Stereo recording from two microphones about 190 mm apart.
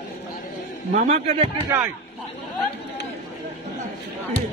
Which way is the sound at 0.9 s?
35° right (ahead or behind).